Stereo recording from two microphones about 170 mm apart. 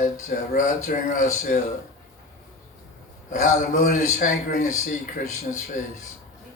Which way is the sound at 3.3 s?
50° left (ahead or behind).